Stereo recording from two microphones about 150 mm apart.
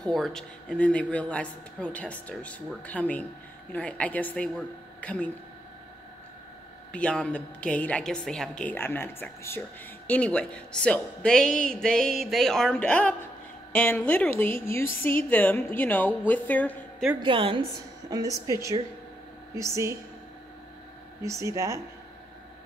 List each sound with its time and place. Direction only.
0.0 s a woman's voice: 5° left (ahead or behind)
6.9 s a woman's voice: 5° left (ahead or behind)
17.2 s a woman's voice: 35° right (ahead or behind)
18.1 s speech: 25° right (ahead or behind)
19.5 s speech: 20° right (ahead or behind)
21.2 s speech: 20° right (ahead or behind)